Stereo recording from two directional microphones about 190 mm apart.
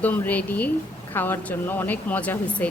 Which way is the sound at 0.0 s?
10° left (ahead or behind).